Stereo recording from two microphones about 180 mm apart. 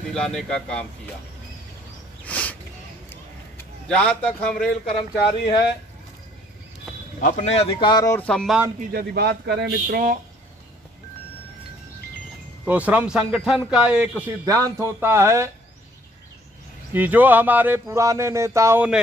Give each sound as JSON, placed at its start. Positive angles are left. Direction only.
{"t": 0.1, "sound": "a man's voice", "side_deg": 5}
{"t": 2.2, "sound": "a sound", "side_deg": 10}
{"t": 3.8, "sound": "a man's voice", "side_deg": 5}
{"t": 7.2, "sound": "speech", "side_deg": 45}
{"t": 8.3, "sound": "a man's voice", "side_deg": 5}
{"t": 8.9, "sound": "speech", "side_deg": -65}
{"t": 12.6, "sound": "a man's voice", "side_deg": -10}
{"t": 14.4, "sound": "speech", "side_deg": -20}
{"t": 16.9, "sound": "speech", "side_deg": -10}